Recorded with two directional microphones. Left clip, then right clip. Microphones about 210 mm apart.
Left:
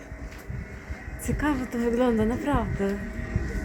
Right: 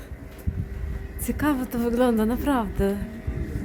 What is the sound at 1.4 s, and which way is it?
A woman's voice, 15° right (ahead or behind).